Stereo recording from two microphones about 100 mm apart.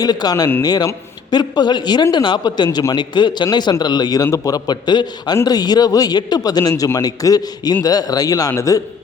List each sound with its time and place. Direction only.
0.0 s a man's voice: 40° left (ahead or behind)